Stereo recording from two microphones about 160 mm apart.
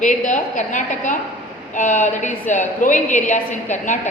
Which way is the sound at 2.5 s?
50° left (ahead or behind).